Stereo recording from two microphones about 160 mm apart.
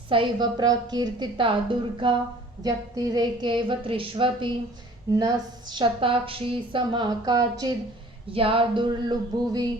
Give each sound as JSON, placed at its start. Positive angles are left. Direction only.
{"t": 0.1, "sound": "a woman's voice", "side_deg": -30}
{"t": 5.1, "sound": "a woman's voice", "side_deg": -20}
{"t": 5.7, "sound": "a woman's voice", "side_deg": -30}
{"t": 8.3, "sound": "speech", "side_deg": -35}